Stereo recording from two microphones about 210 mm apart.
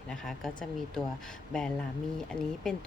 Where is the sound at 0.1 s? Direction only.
Centre (ahead or behind).